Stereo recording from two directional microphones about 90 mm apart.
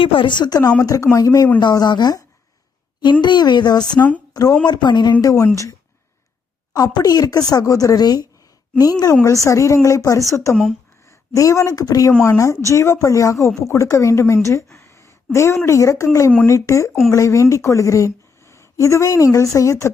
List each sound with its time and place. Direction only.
0.0 s speech: 70° left (ahead or behind); by 0.7 s 50° left (ahead or behind)
0.8 s speech: 35° left (ahead or behind)
1.5 s a woman's voice: 50° left (ahead or behind)
5.2 s speech: 35° left (ahead or behind)
6.7 s a woman's voice: 45° left (ahead or behind)
10.5 s speech: centre (ahead or behind)
11.0 s a woman's voice: 35° left (ahead or behind)
14.4 s a sound: 30° left (ahead or behind)
15.6 s a woman's voice: 35° left (ahead or behind)